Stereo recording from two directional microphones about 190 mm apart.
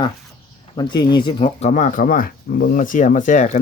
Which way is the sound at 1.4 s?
40° left (ahead or behind).